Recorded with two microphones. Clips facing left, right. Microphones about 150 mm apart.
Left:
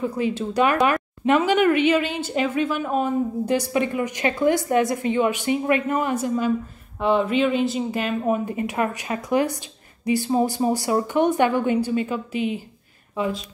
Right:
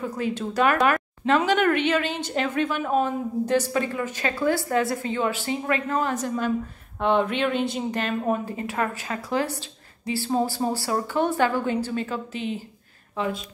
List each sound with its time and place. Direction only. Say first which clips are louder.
0.2 s a woman's voice: left 1 dB; 10° left (ahead or behind)
3.4 s a woman's voice: left 1 dB; 15° left (ahead or behind)